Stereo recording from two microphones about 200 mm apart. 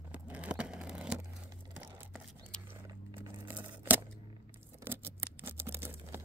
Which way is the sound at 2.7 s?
10° right (ahead or behind).